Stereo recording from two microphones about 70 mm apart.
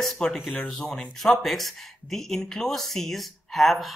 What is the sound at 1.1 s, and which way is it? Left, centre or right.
Speech, centre.